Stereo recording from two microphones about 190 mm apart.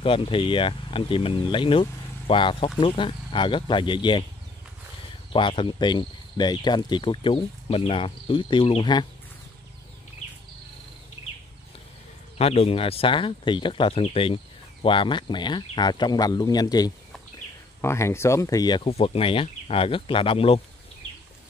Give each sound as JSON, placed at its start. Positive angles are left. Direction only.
{"t": 0.0, "sound": "speech", "side_deg": 30}
{"t": 5.3, "sound": "speech", "side_deg": 25}
{"t": 12.4, "sound": "speech", "side_deg": 30}